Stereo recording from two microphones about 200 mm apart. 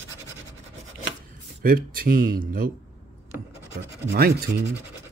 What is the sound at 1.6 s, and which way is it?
Speech, 45° right (ahead or behind).